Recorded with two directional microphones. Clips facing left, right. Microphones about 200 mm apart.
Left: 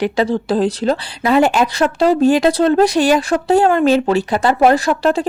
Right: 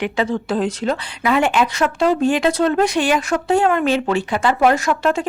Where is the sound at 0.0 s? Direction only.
35° left (ahead or behind).